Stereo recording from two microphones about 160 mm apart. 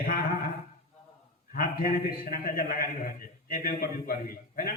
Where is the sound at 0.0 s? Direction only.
60° left (ahead or behind).